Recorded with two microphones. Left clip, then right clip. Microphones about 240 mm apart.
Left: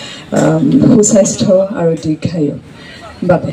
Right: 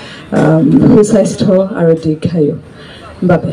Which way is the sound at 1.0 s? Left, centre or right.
Left.